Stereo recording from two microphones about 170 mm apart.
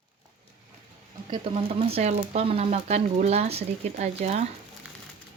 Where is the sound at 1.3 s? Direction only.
30° right (ahead or behind).